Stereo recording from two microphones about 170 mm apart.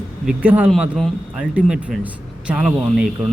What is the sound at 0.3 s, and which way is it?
Speech, 10° right (ahead or behind).